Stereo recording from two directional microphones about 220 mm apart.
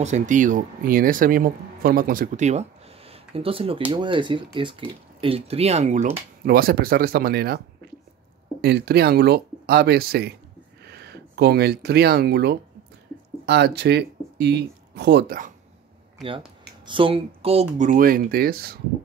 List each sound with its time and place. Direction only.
0.0 s speech: 35° right (ahead or behind)
6.4 s speech: 45° right (ahead or behind)
16.3 s speech: 25° right (ahead or behind)
17.7 s speech: 35° right (ahead or behind)